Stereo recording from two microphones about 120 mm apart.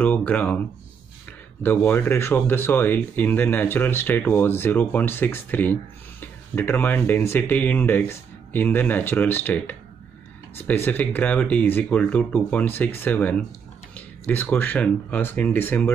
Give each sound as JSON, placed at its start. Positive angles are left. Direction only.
{"t": 0.0, "sound": "speech", "side_deg": 15}
{"t": 1.6, "sound": "speech", "side_deg": 15}